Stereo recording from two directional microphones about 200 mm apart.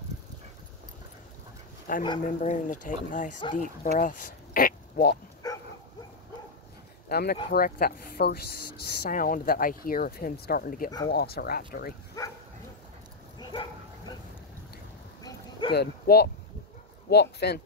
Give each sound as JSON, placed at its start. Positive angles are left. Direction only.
{"t": 1.9, "sound": "speech", "side_deg": 45}
{"t": 4.0, "sound": "oink", "side_deg": 45}
{"t": 5.4, "sound": "bow-wow", "side_deg": 20}
{"t": 7.1, "sound": "speech", "side_deg": 50}
{"t": 12.2, "sound": "bow-wow", "side_deg": 15}
{"t": 13.4, "sound": "bow-wow", "side_deg": 25}
{"t": 15.7, "sound": "speech", "side_deg": 55}